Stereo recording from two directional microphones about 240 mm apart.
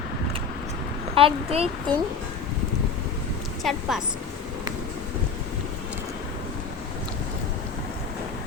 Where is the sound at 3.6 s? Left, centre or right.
Centre.